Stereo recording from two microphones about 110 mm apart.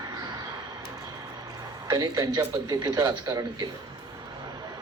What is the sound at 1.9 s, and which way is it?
A man's voice, 35° right (ahead or behind).